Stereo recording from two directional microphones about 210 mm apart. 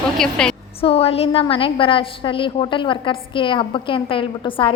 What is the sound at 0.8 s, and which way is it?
A woman's voice, 30° left (ahead or behind).